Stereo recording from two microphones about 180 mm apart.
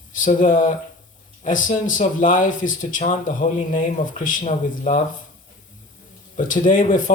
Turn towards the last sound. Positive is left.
turn(degrees=45)  # may be behind; listen again after turning